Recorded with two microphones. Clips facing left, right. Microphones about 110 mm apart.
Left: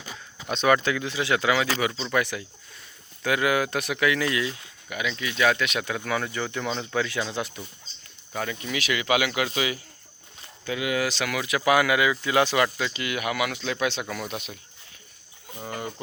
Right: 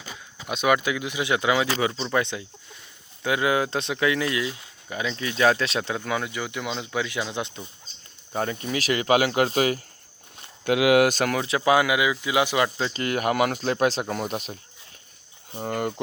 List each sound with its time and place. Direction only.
0.4 s speech: 10° right (ahead or behind); by 6.0 s 30° right (ahead or behind)
6.1 s speech: 15° right (ahead or behind)
8.3 s speech: 35° right (ahead or behind)
10.7 s speech: 80° right
11.1 s speech: 40° right (ahead or behind); by 12.9 s 25° right (ahead or behind)
12.9 s speech: 40° right (ahead or behind)
15.6 s speech: 60° right (ahead or behind)